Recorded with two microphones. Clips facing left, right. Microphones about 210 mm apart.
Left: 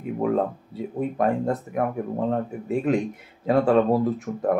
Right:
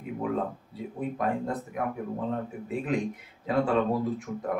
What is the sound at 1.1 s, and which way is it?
Speech, 45° left (ahead or behind).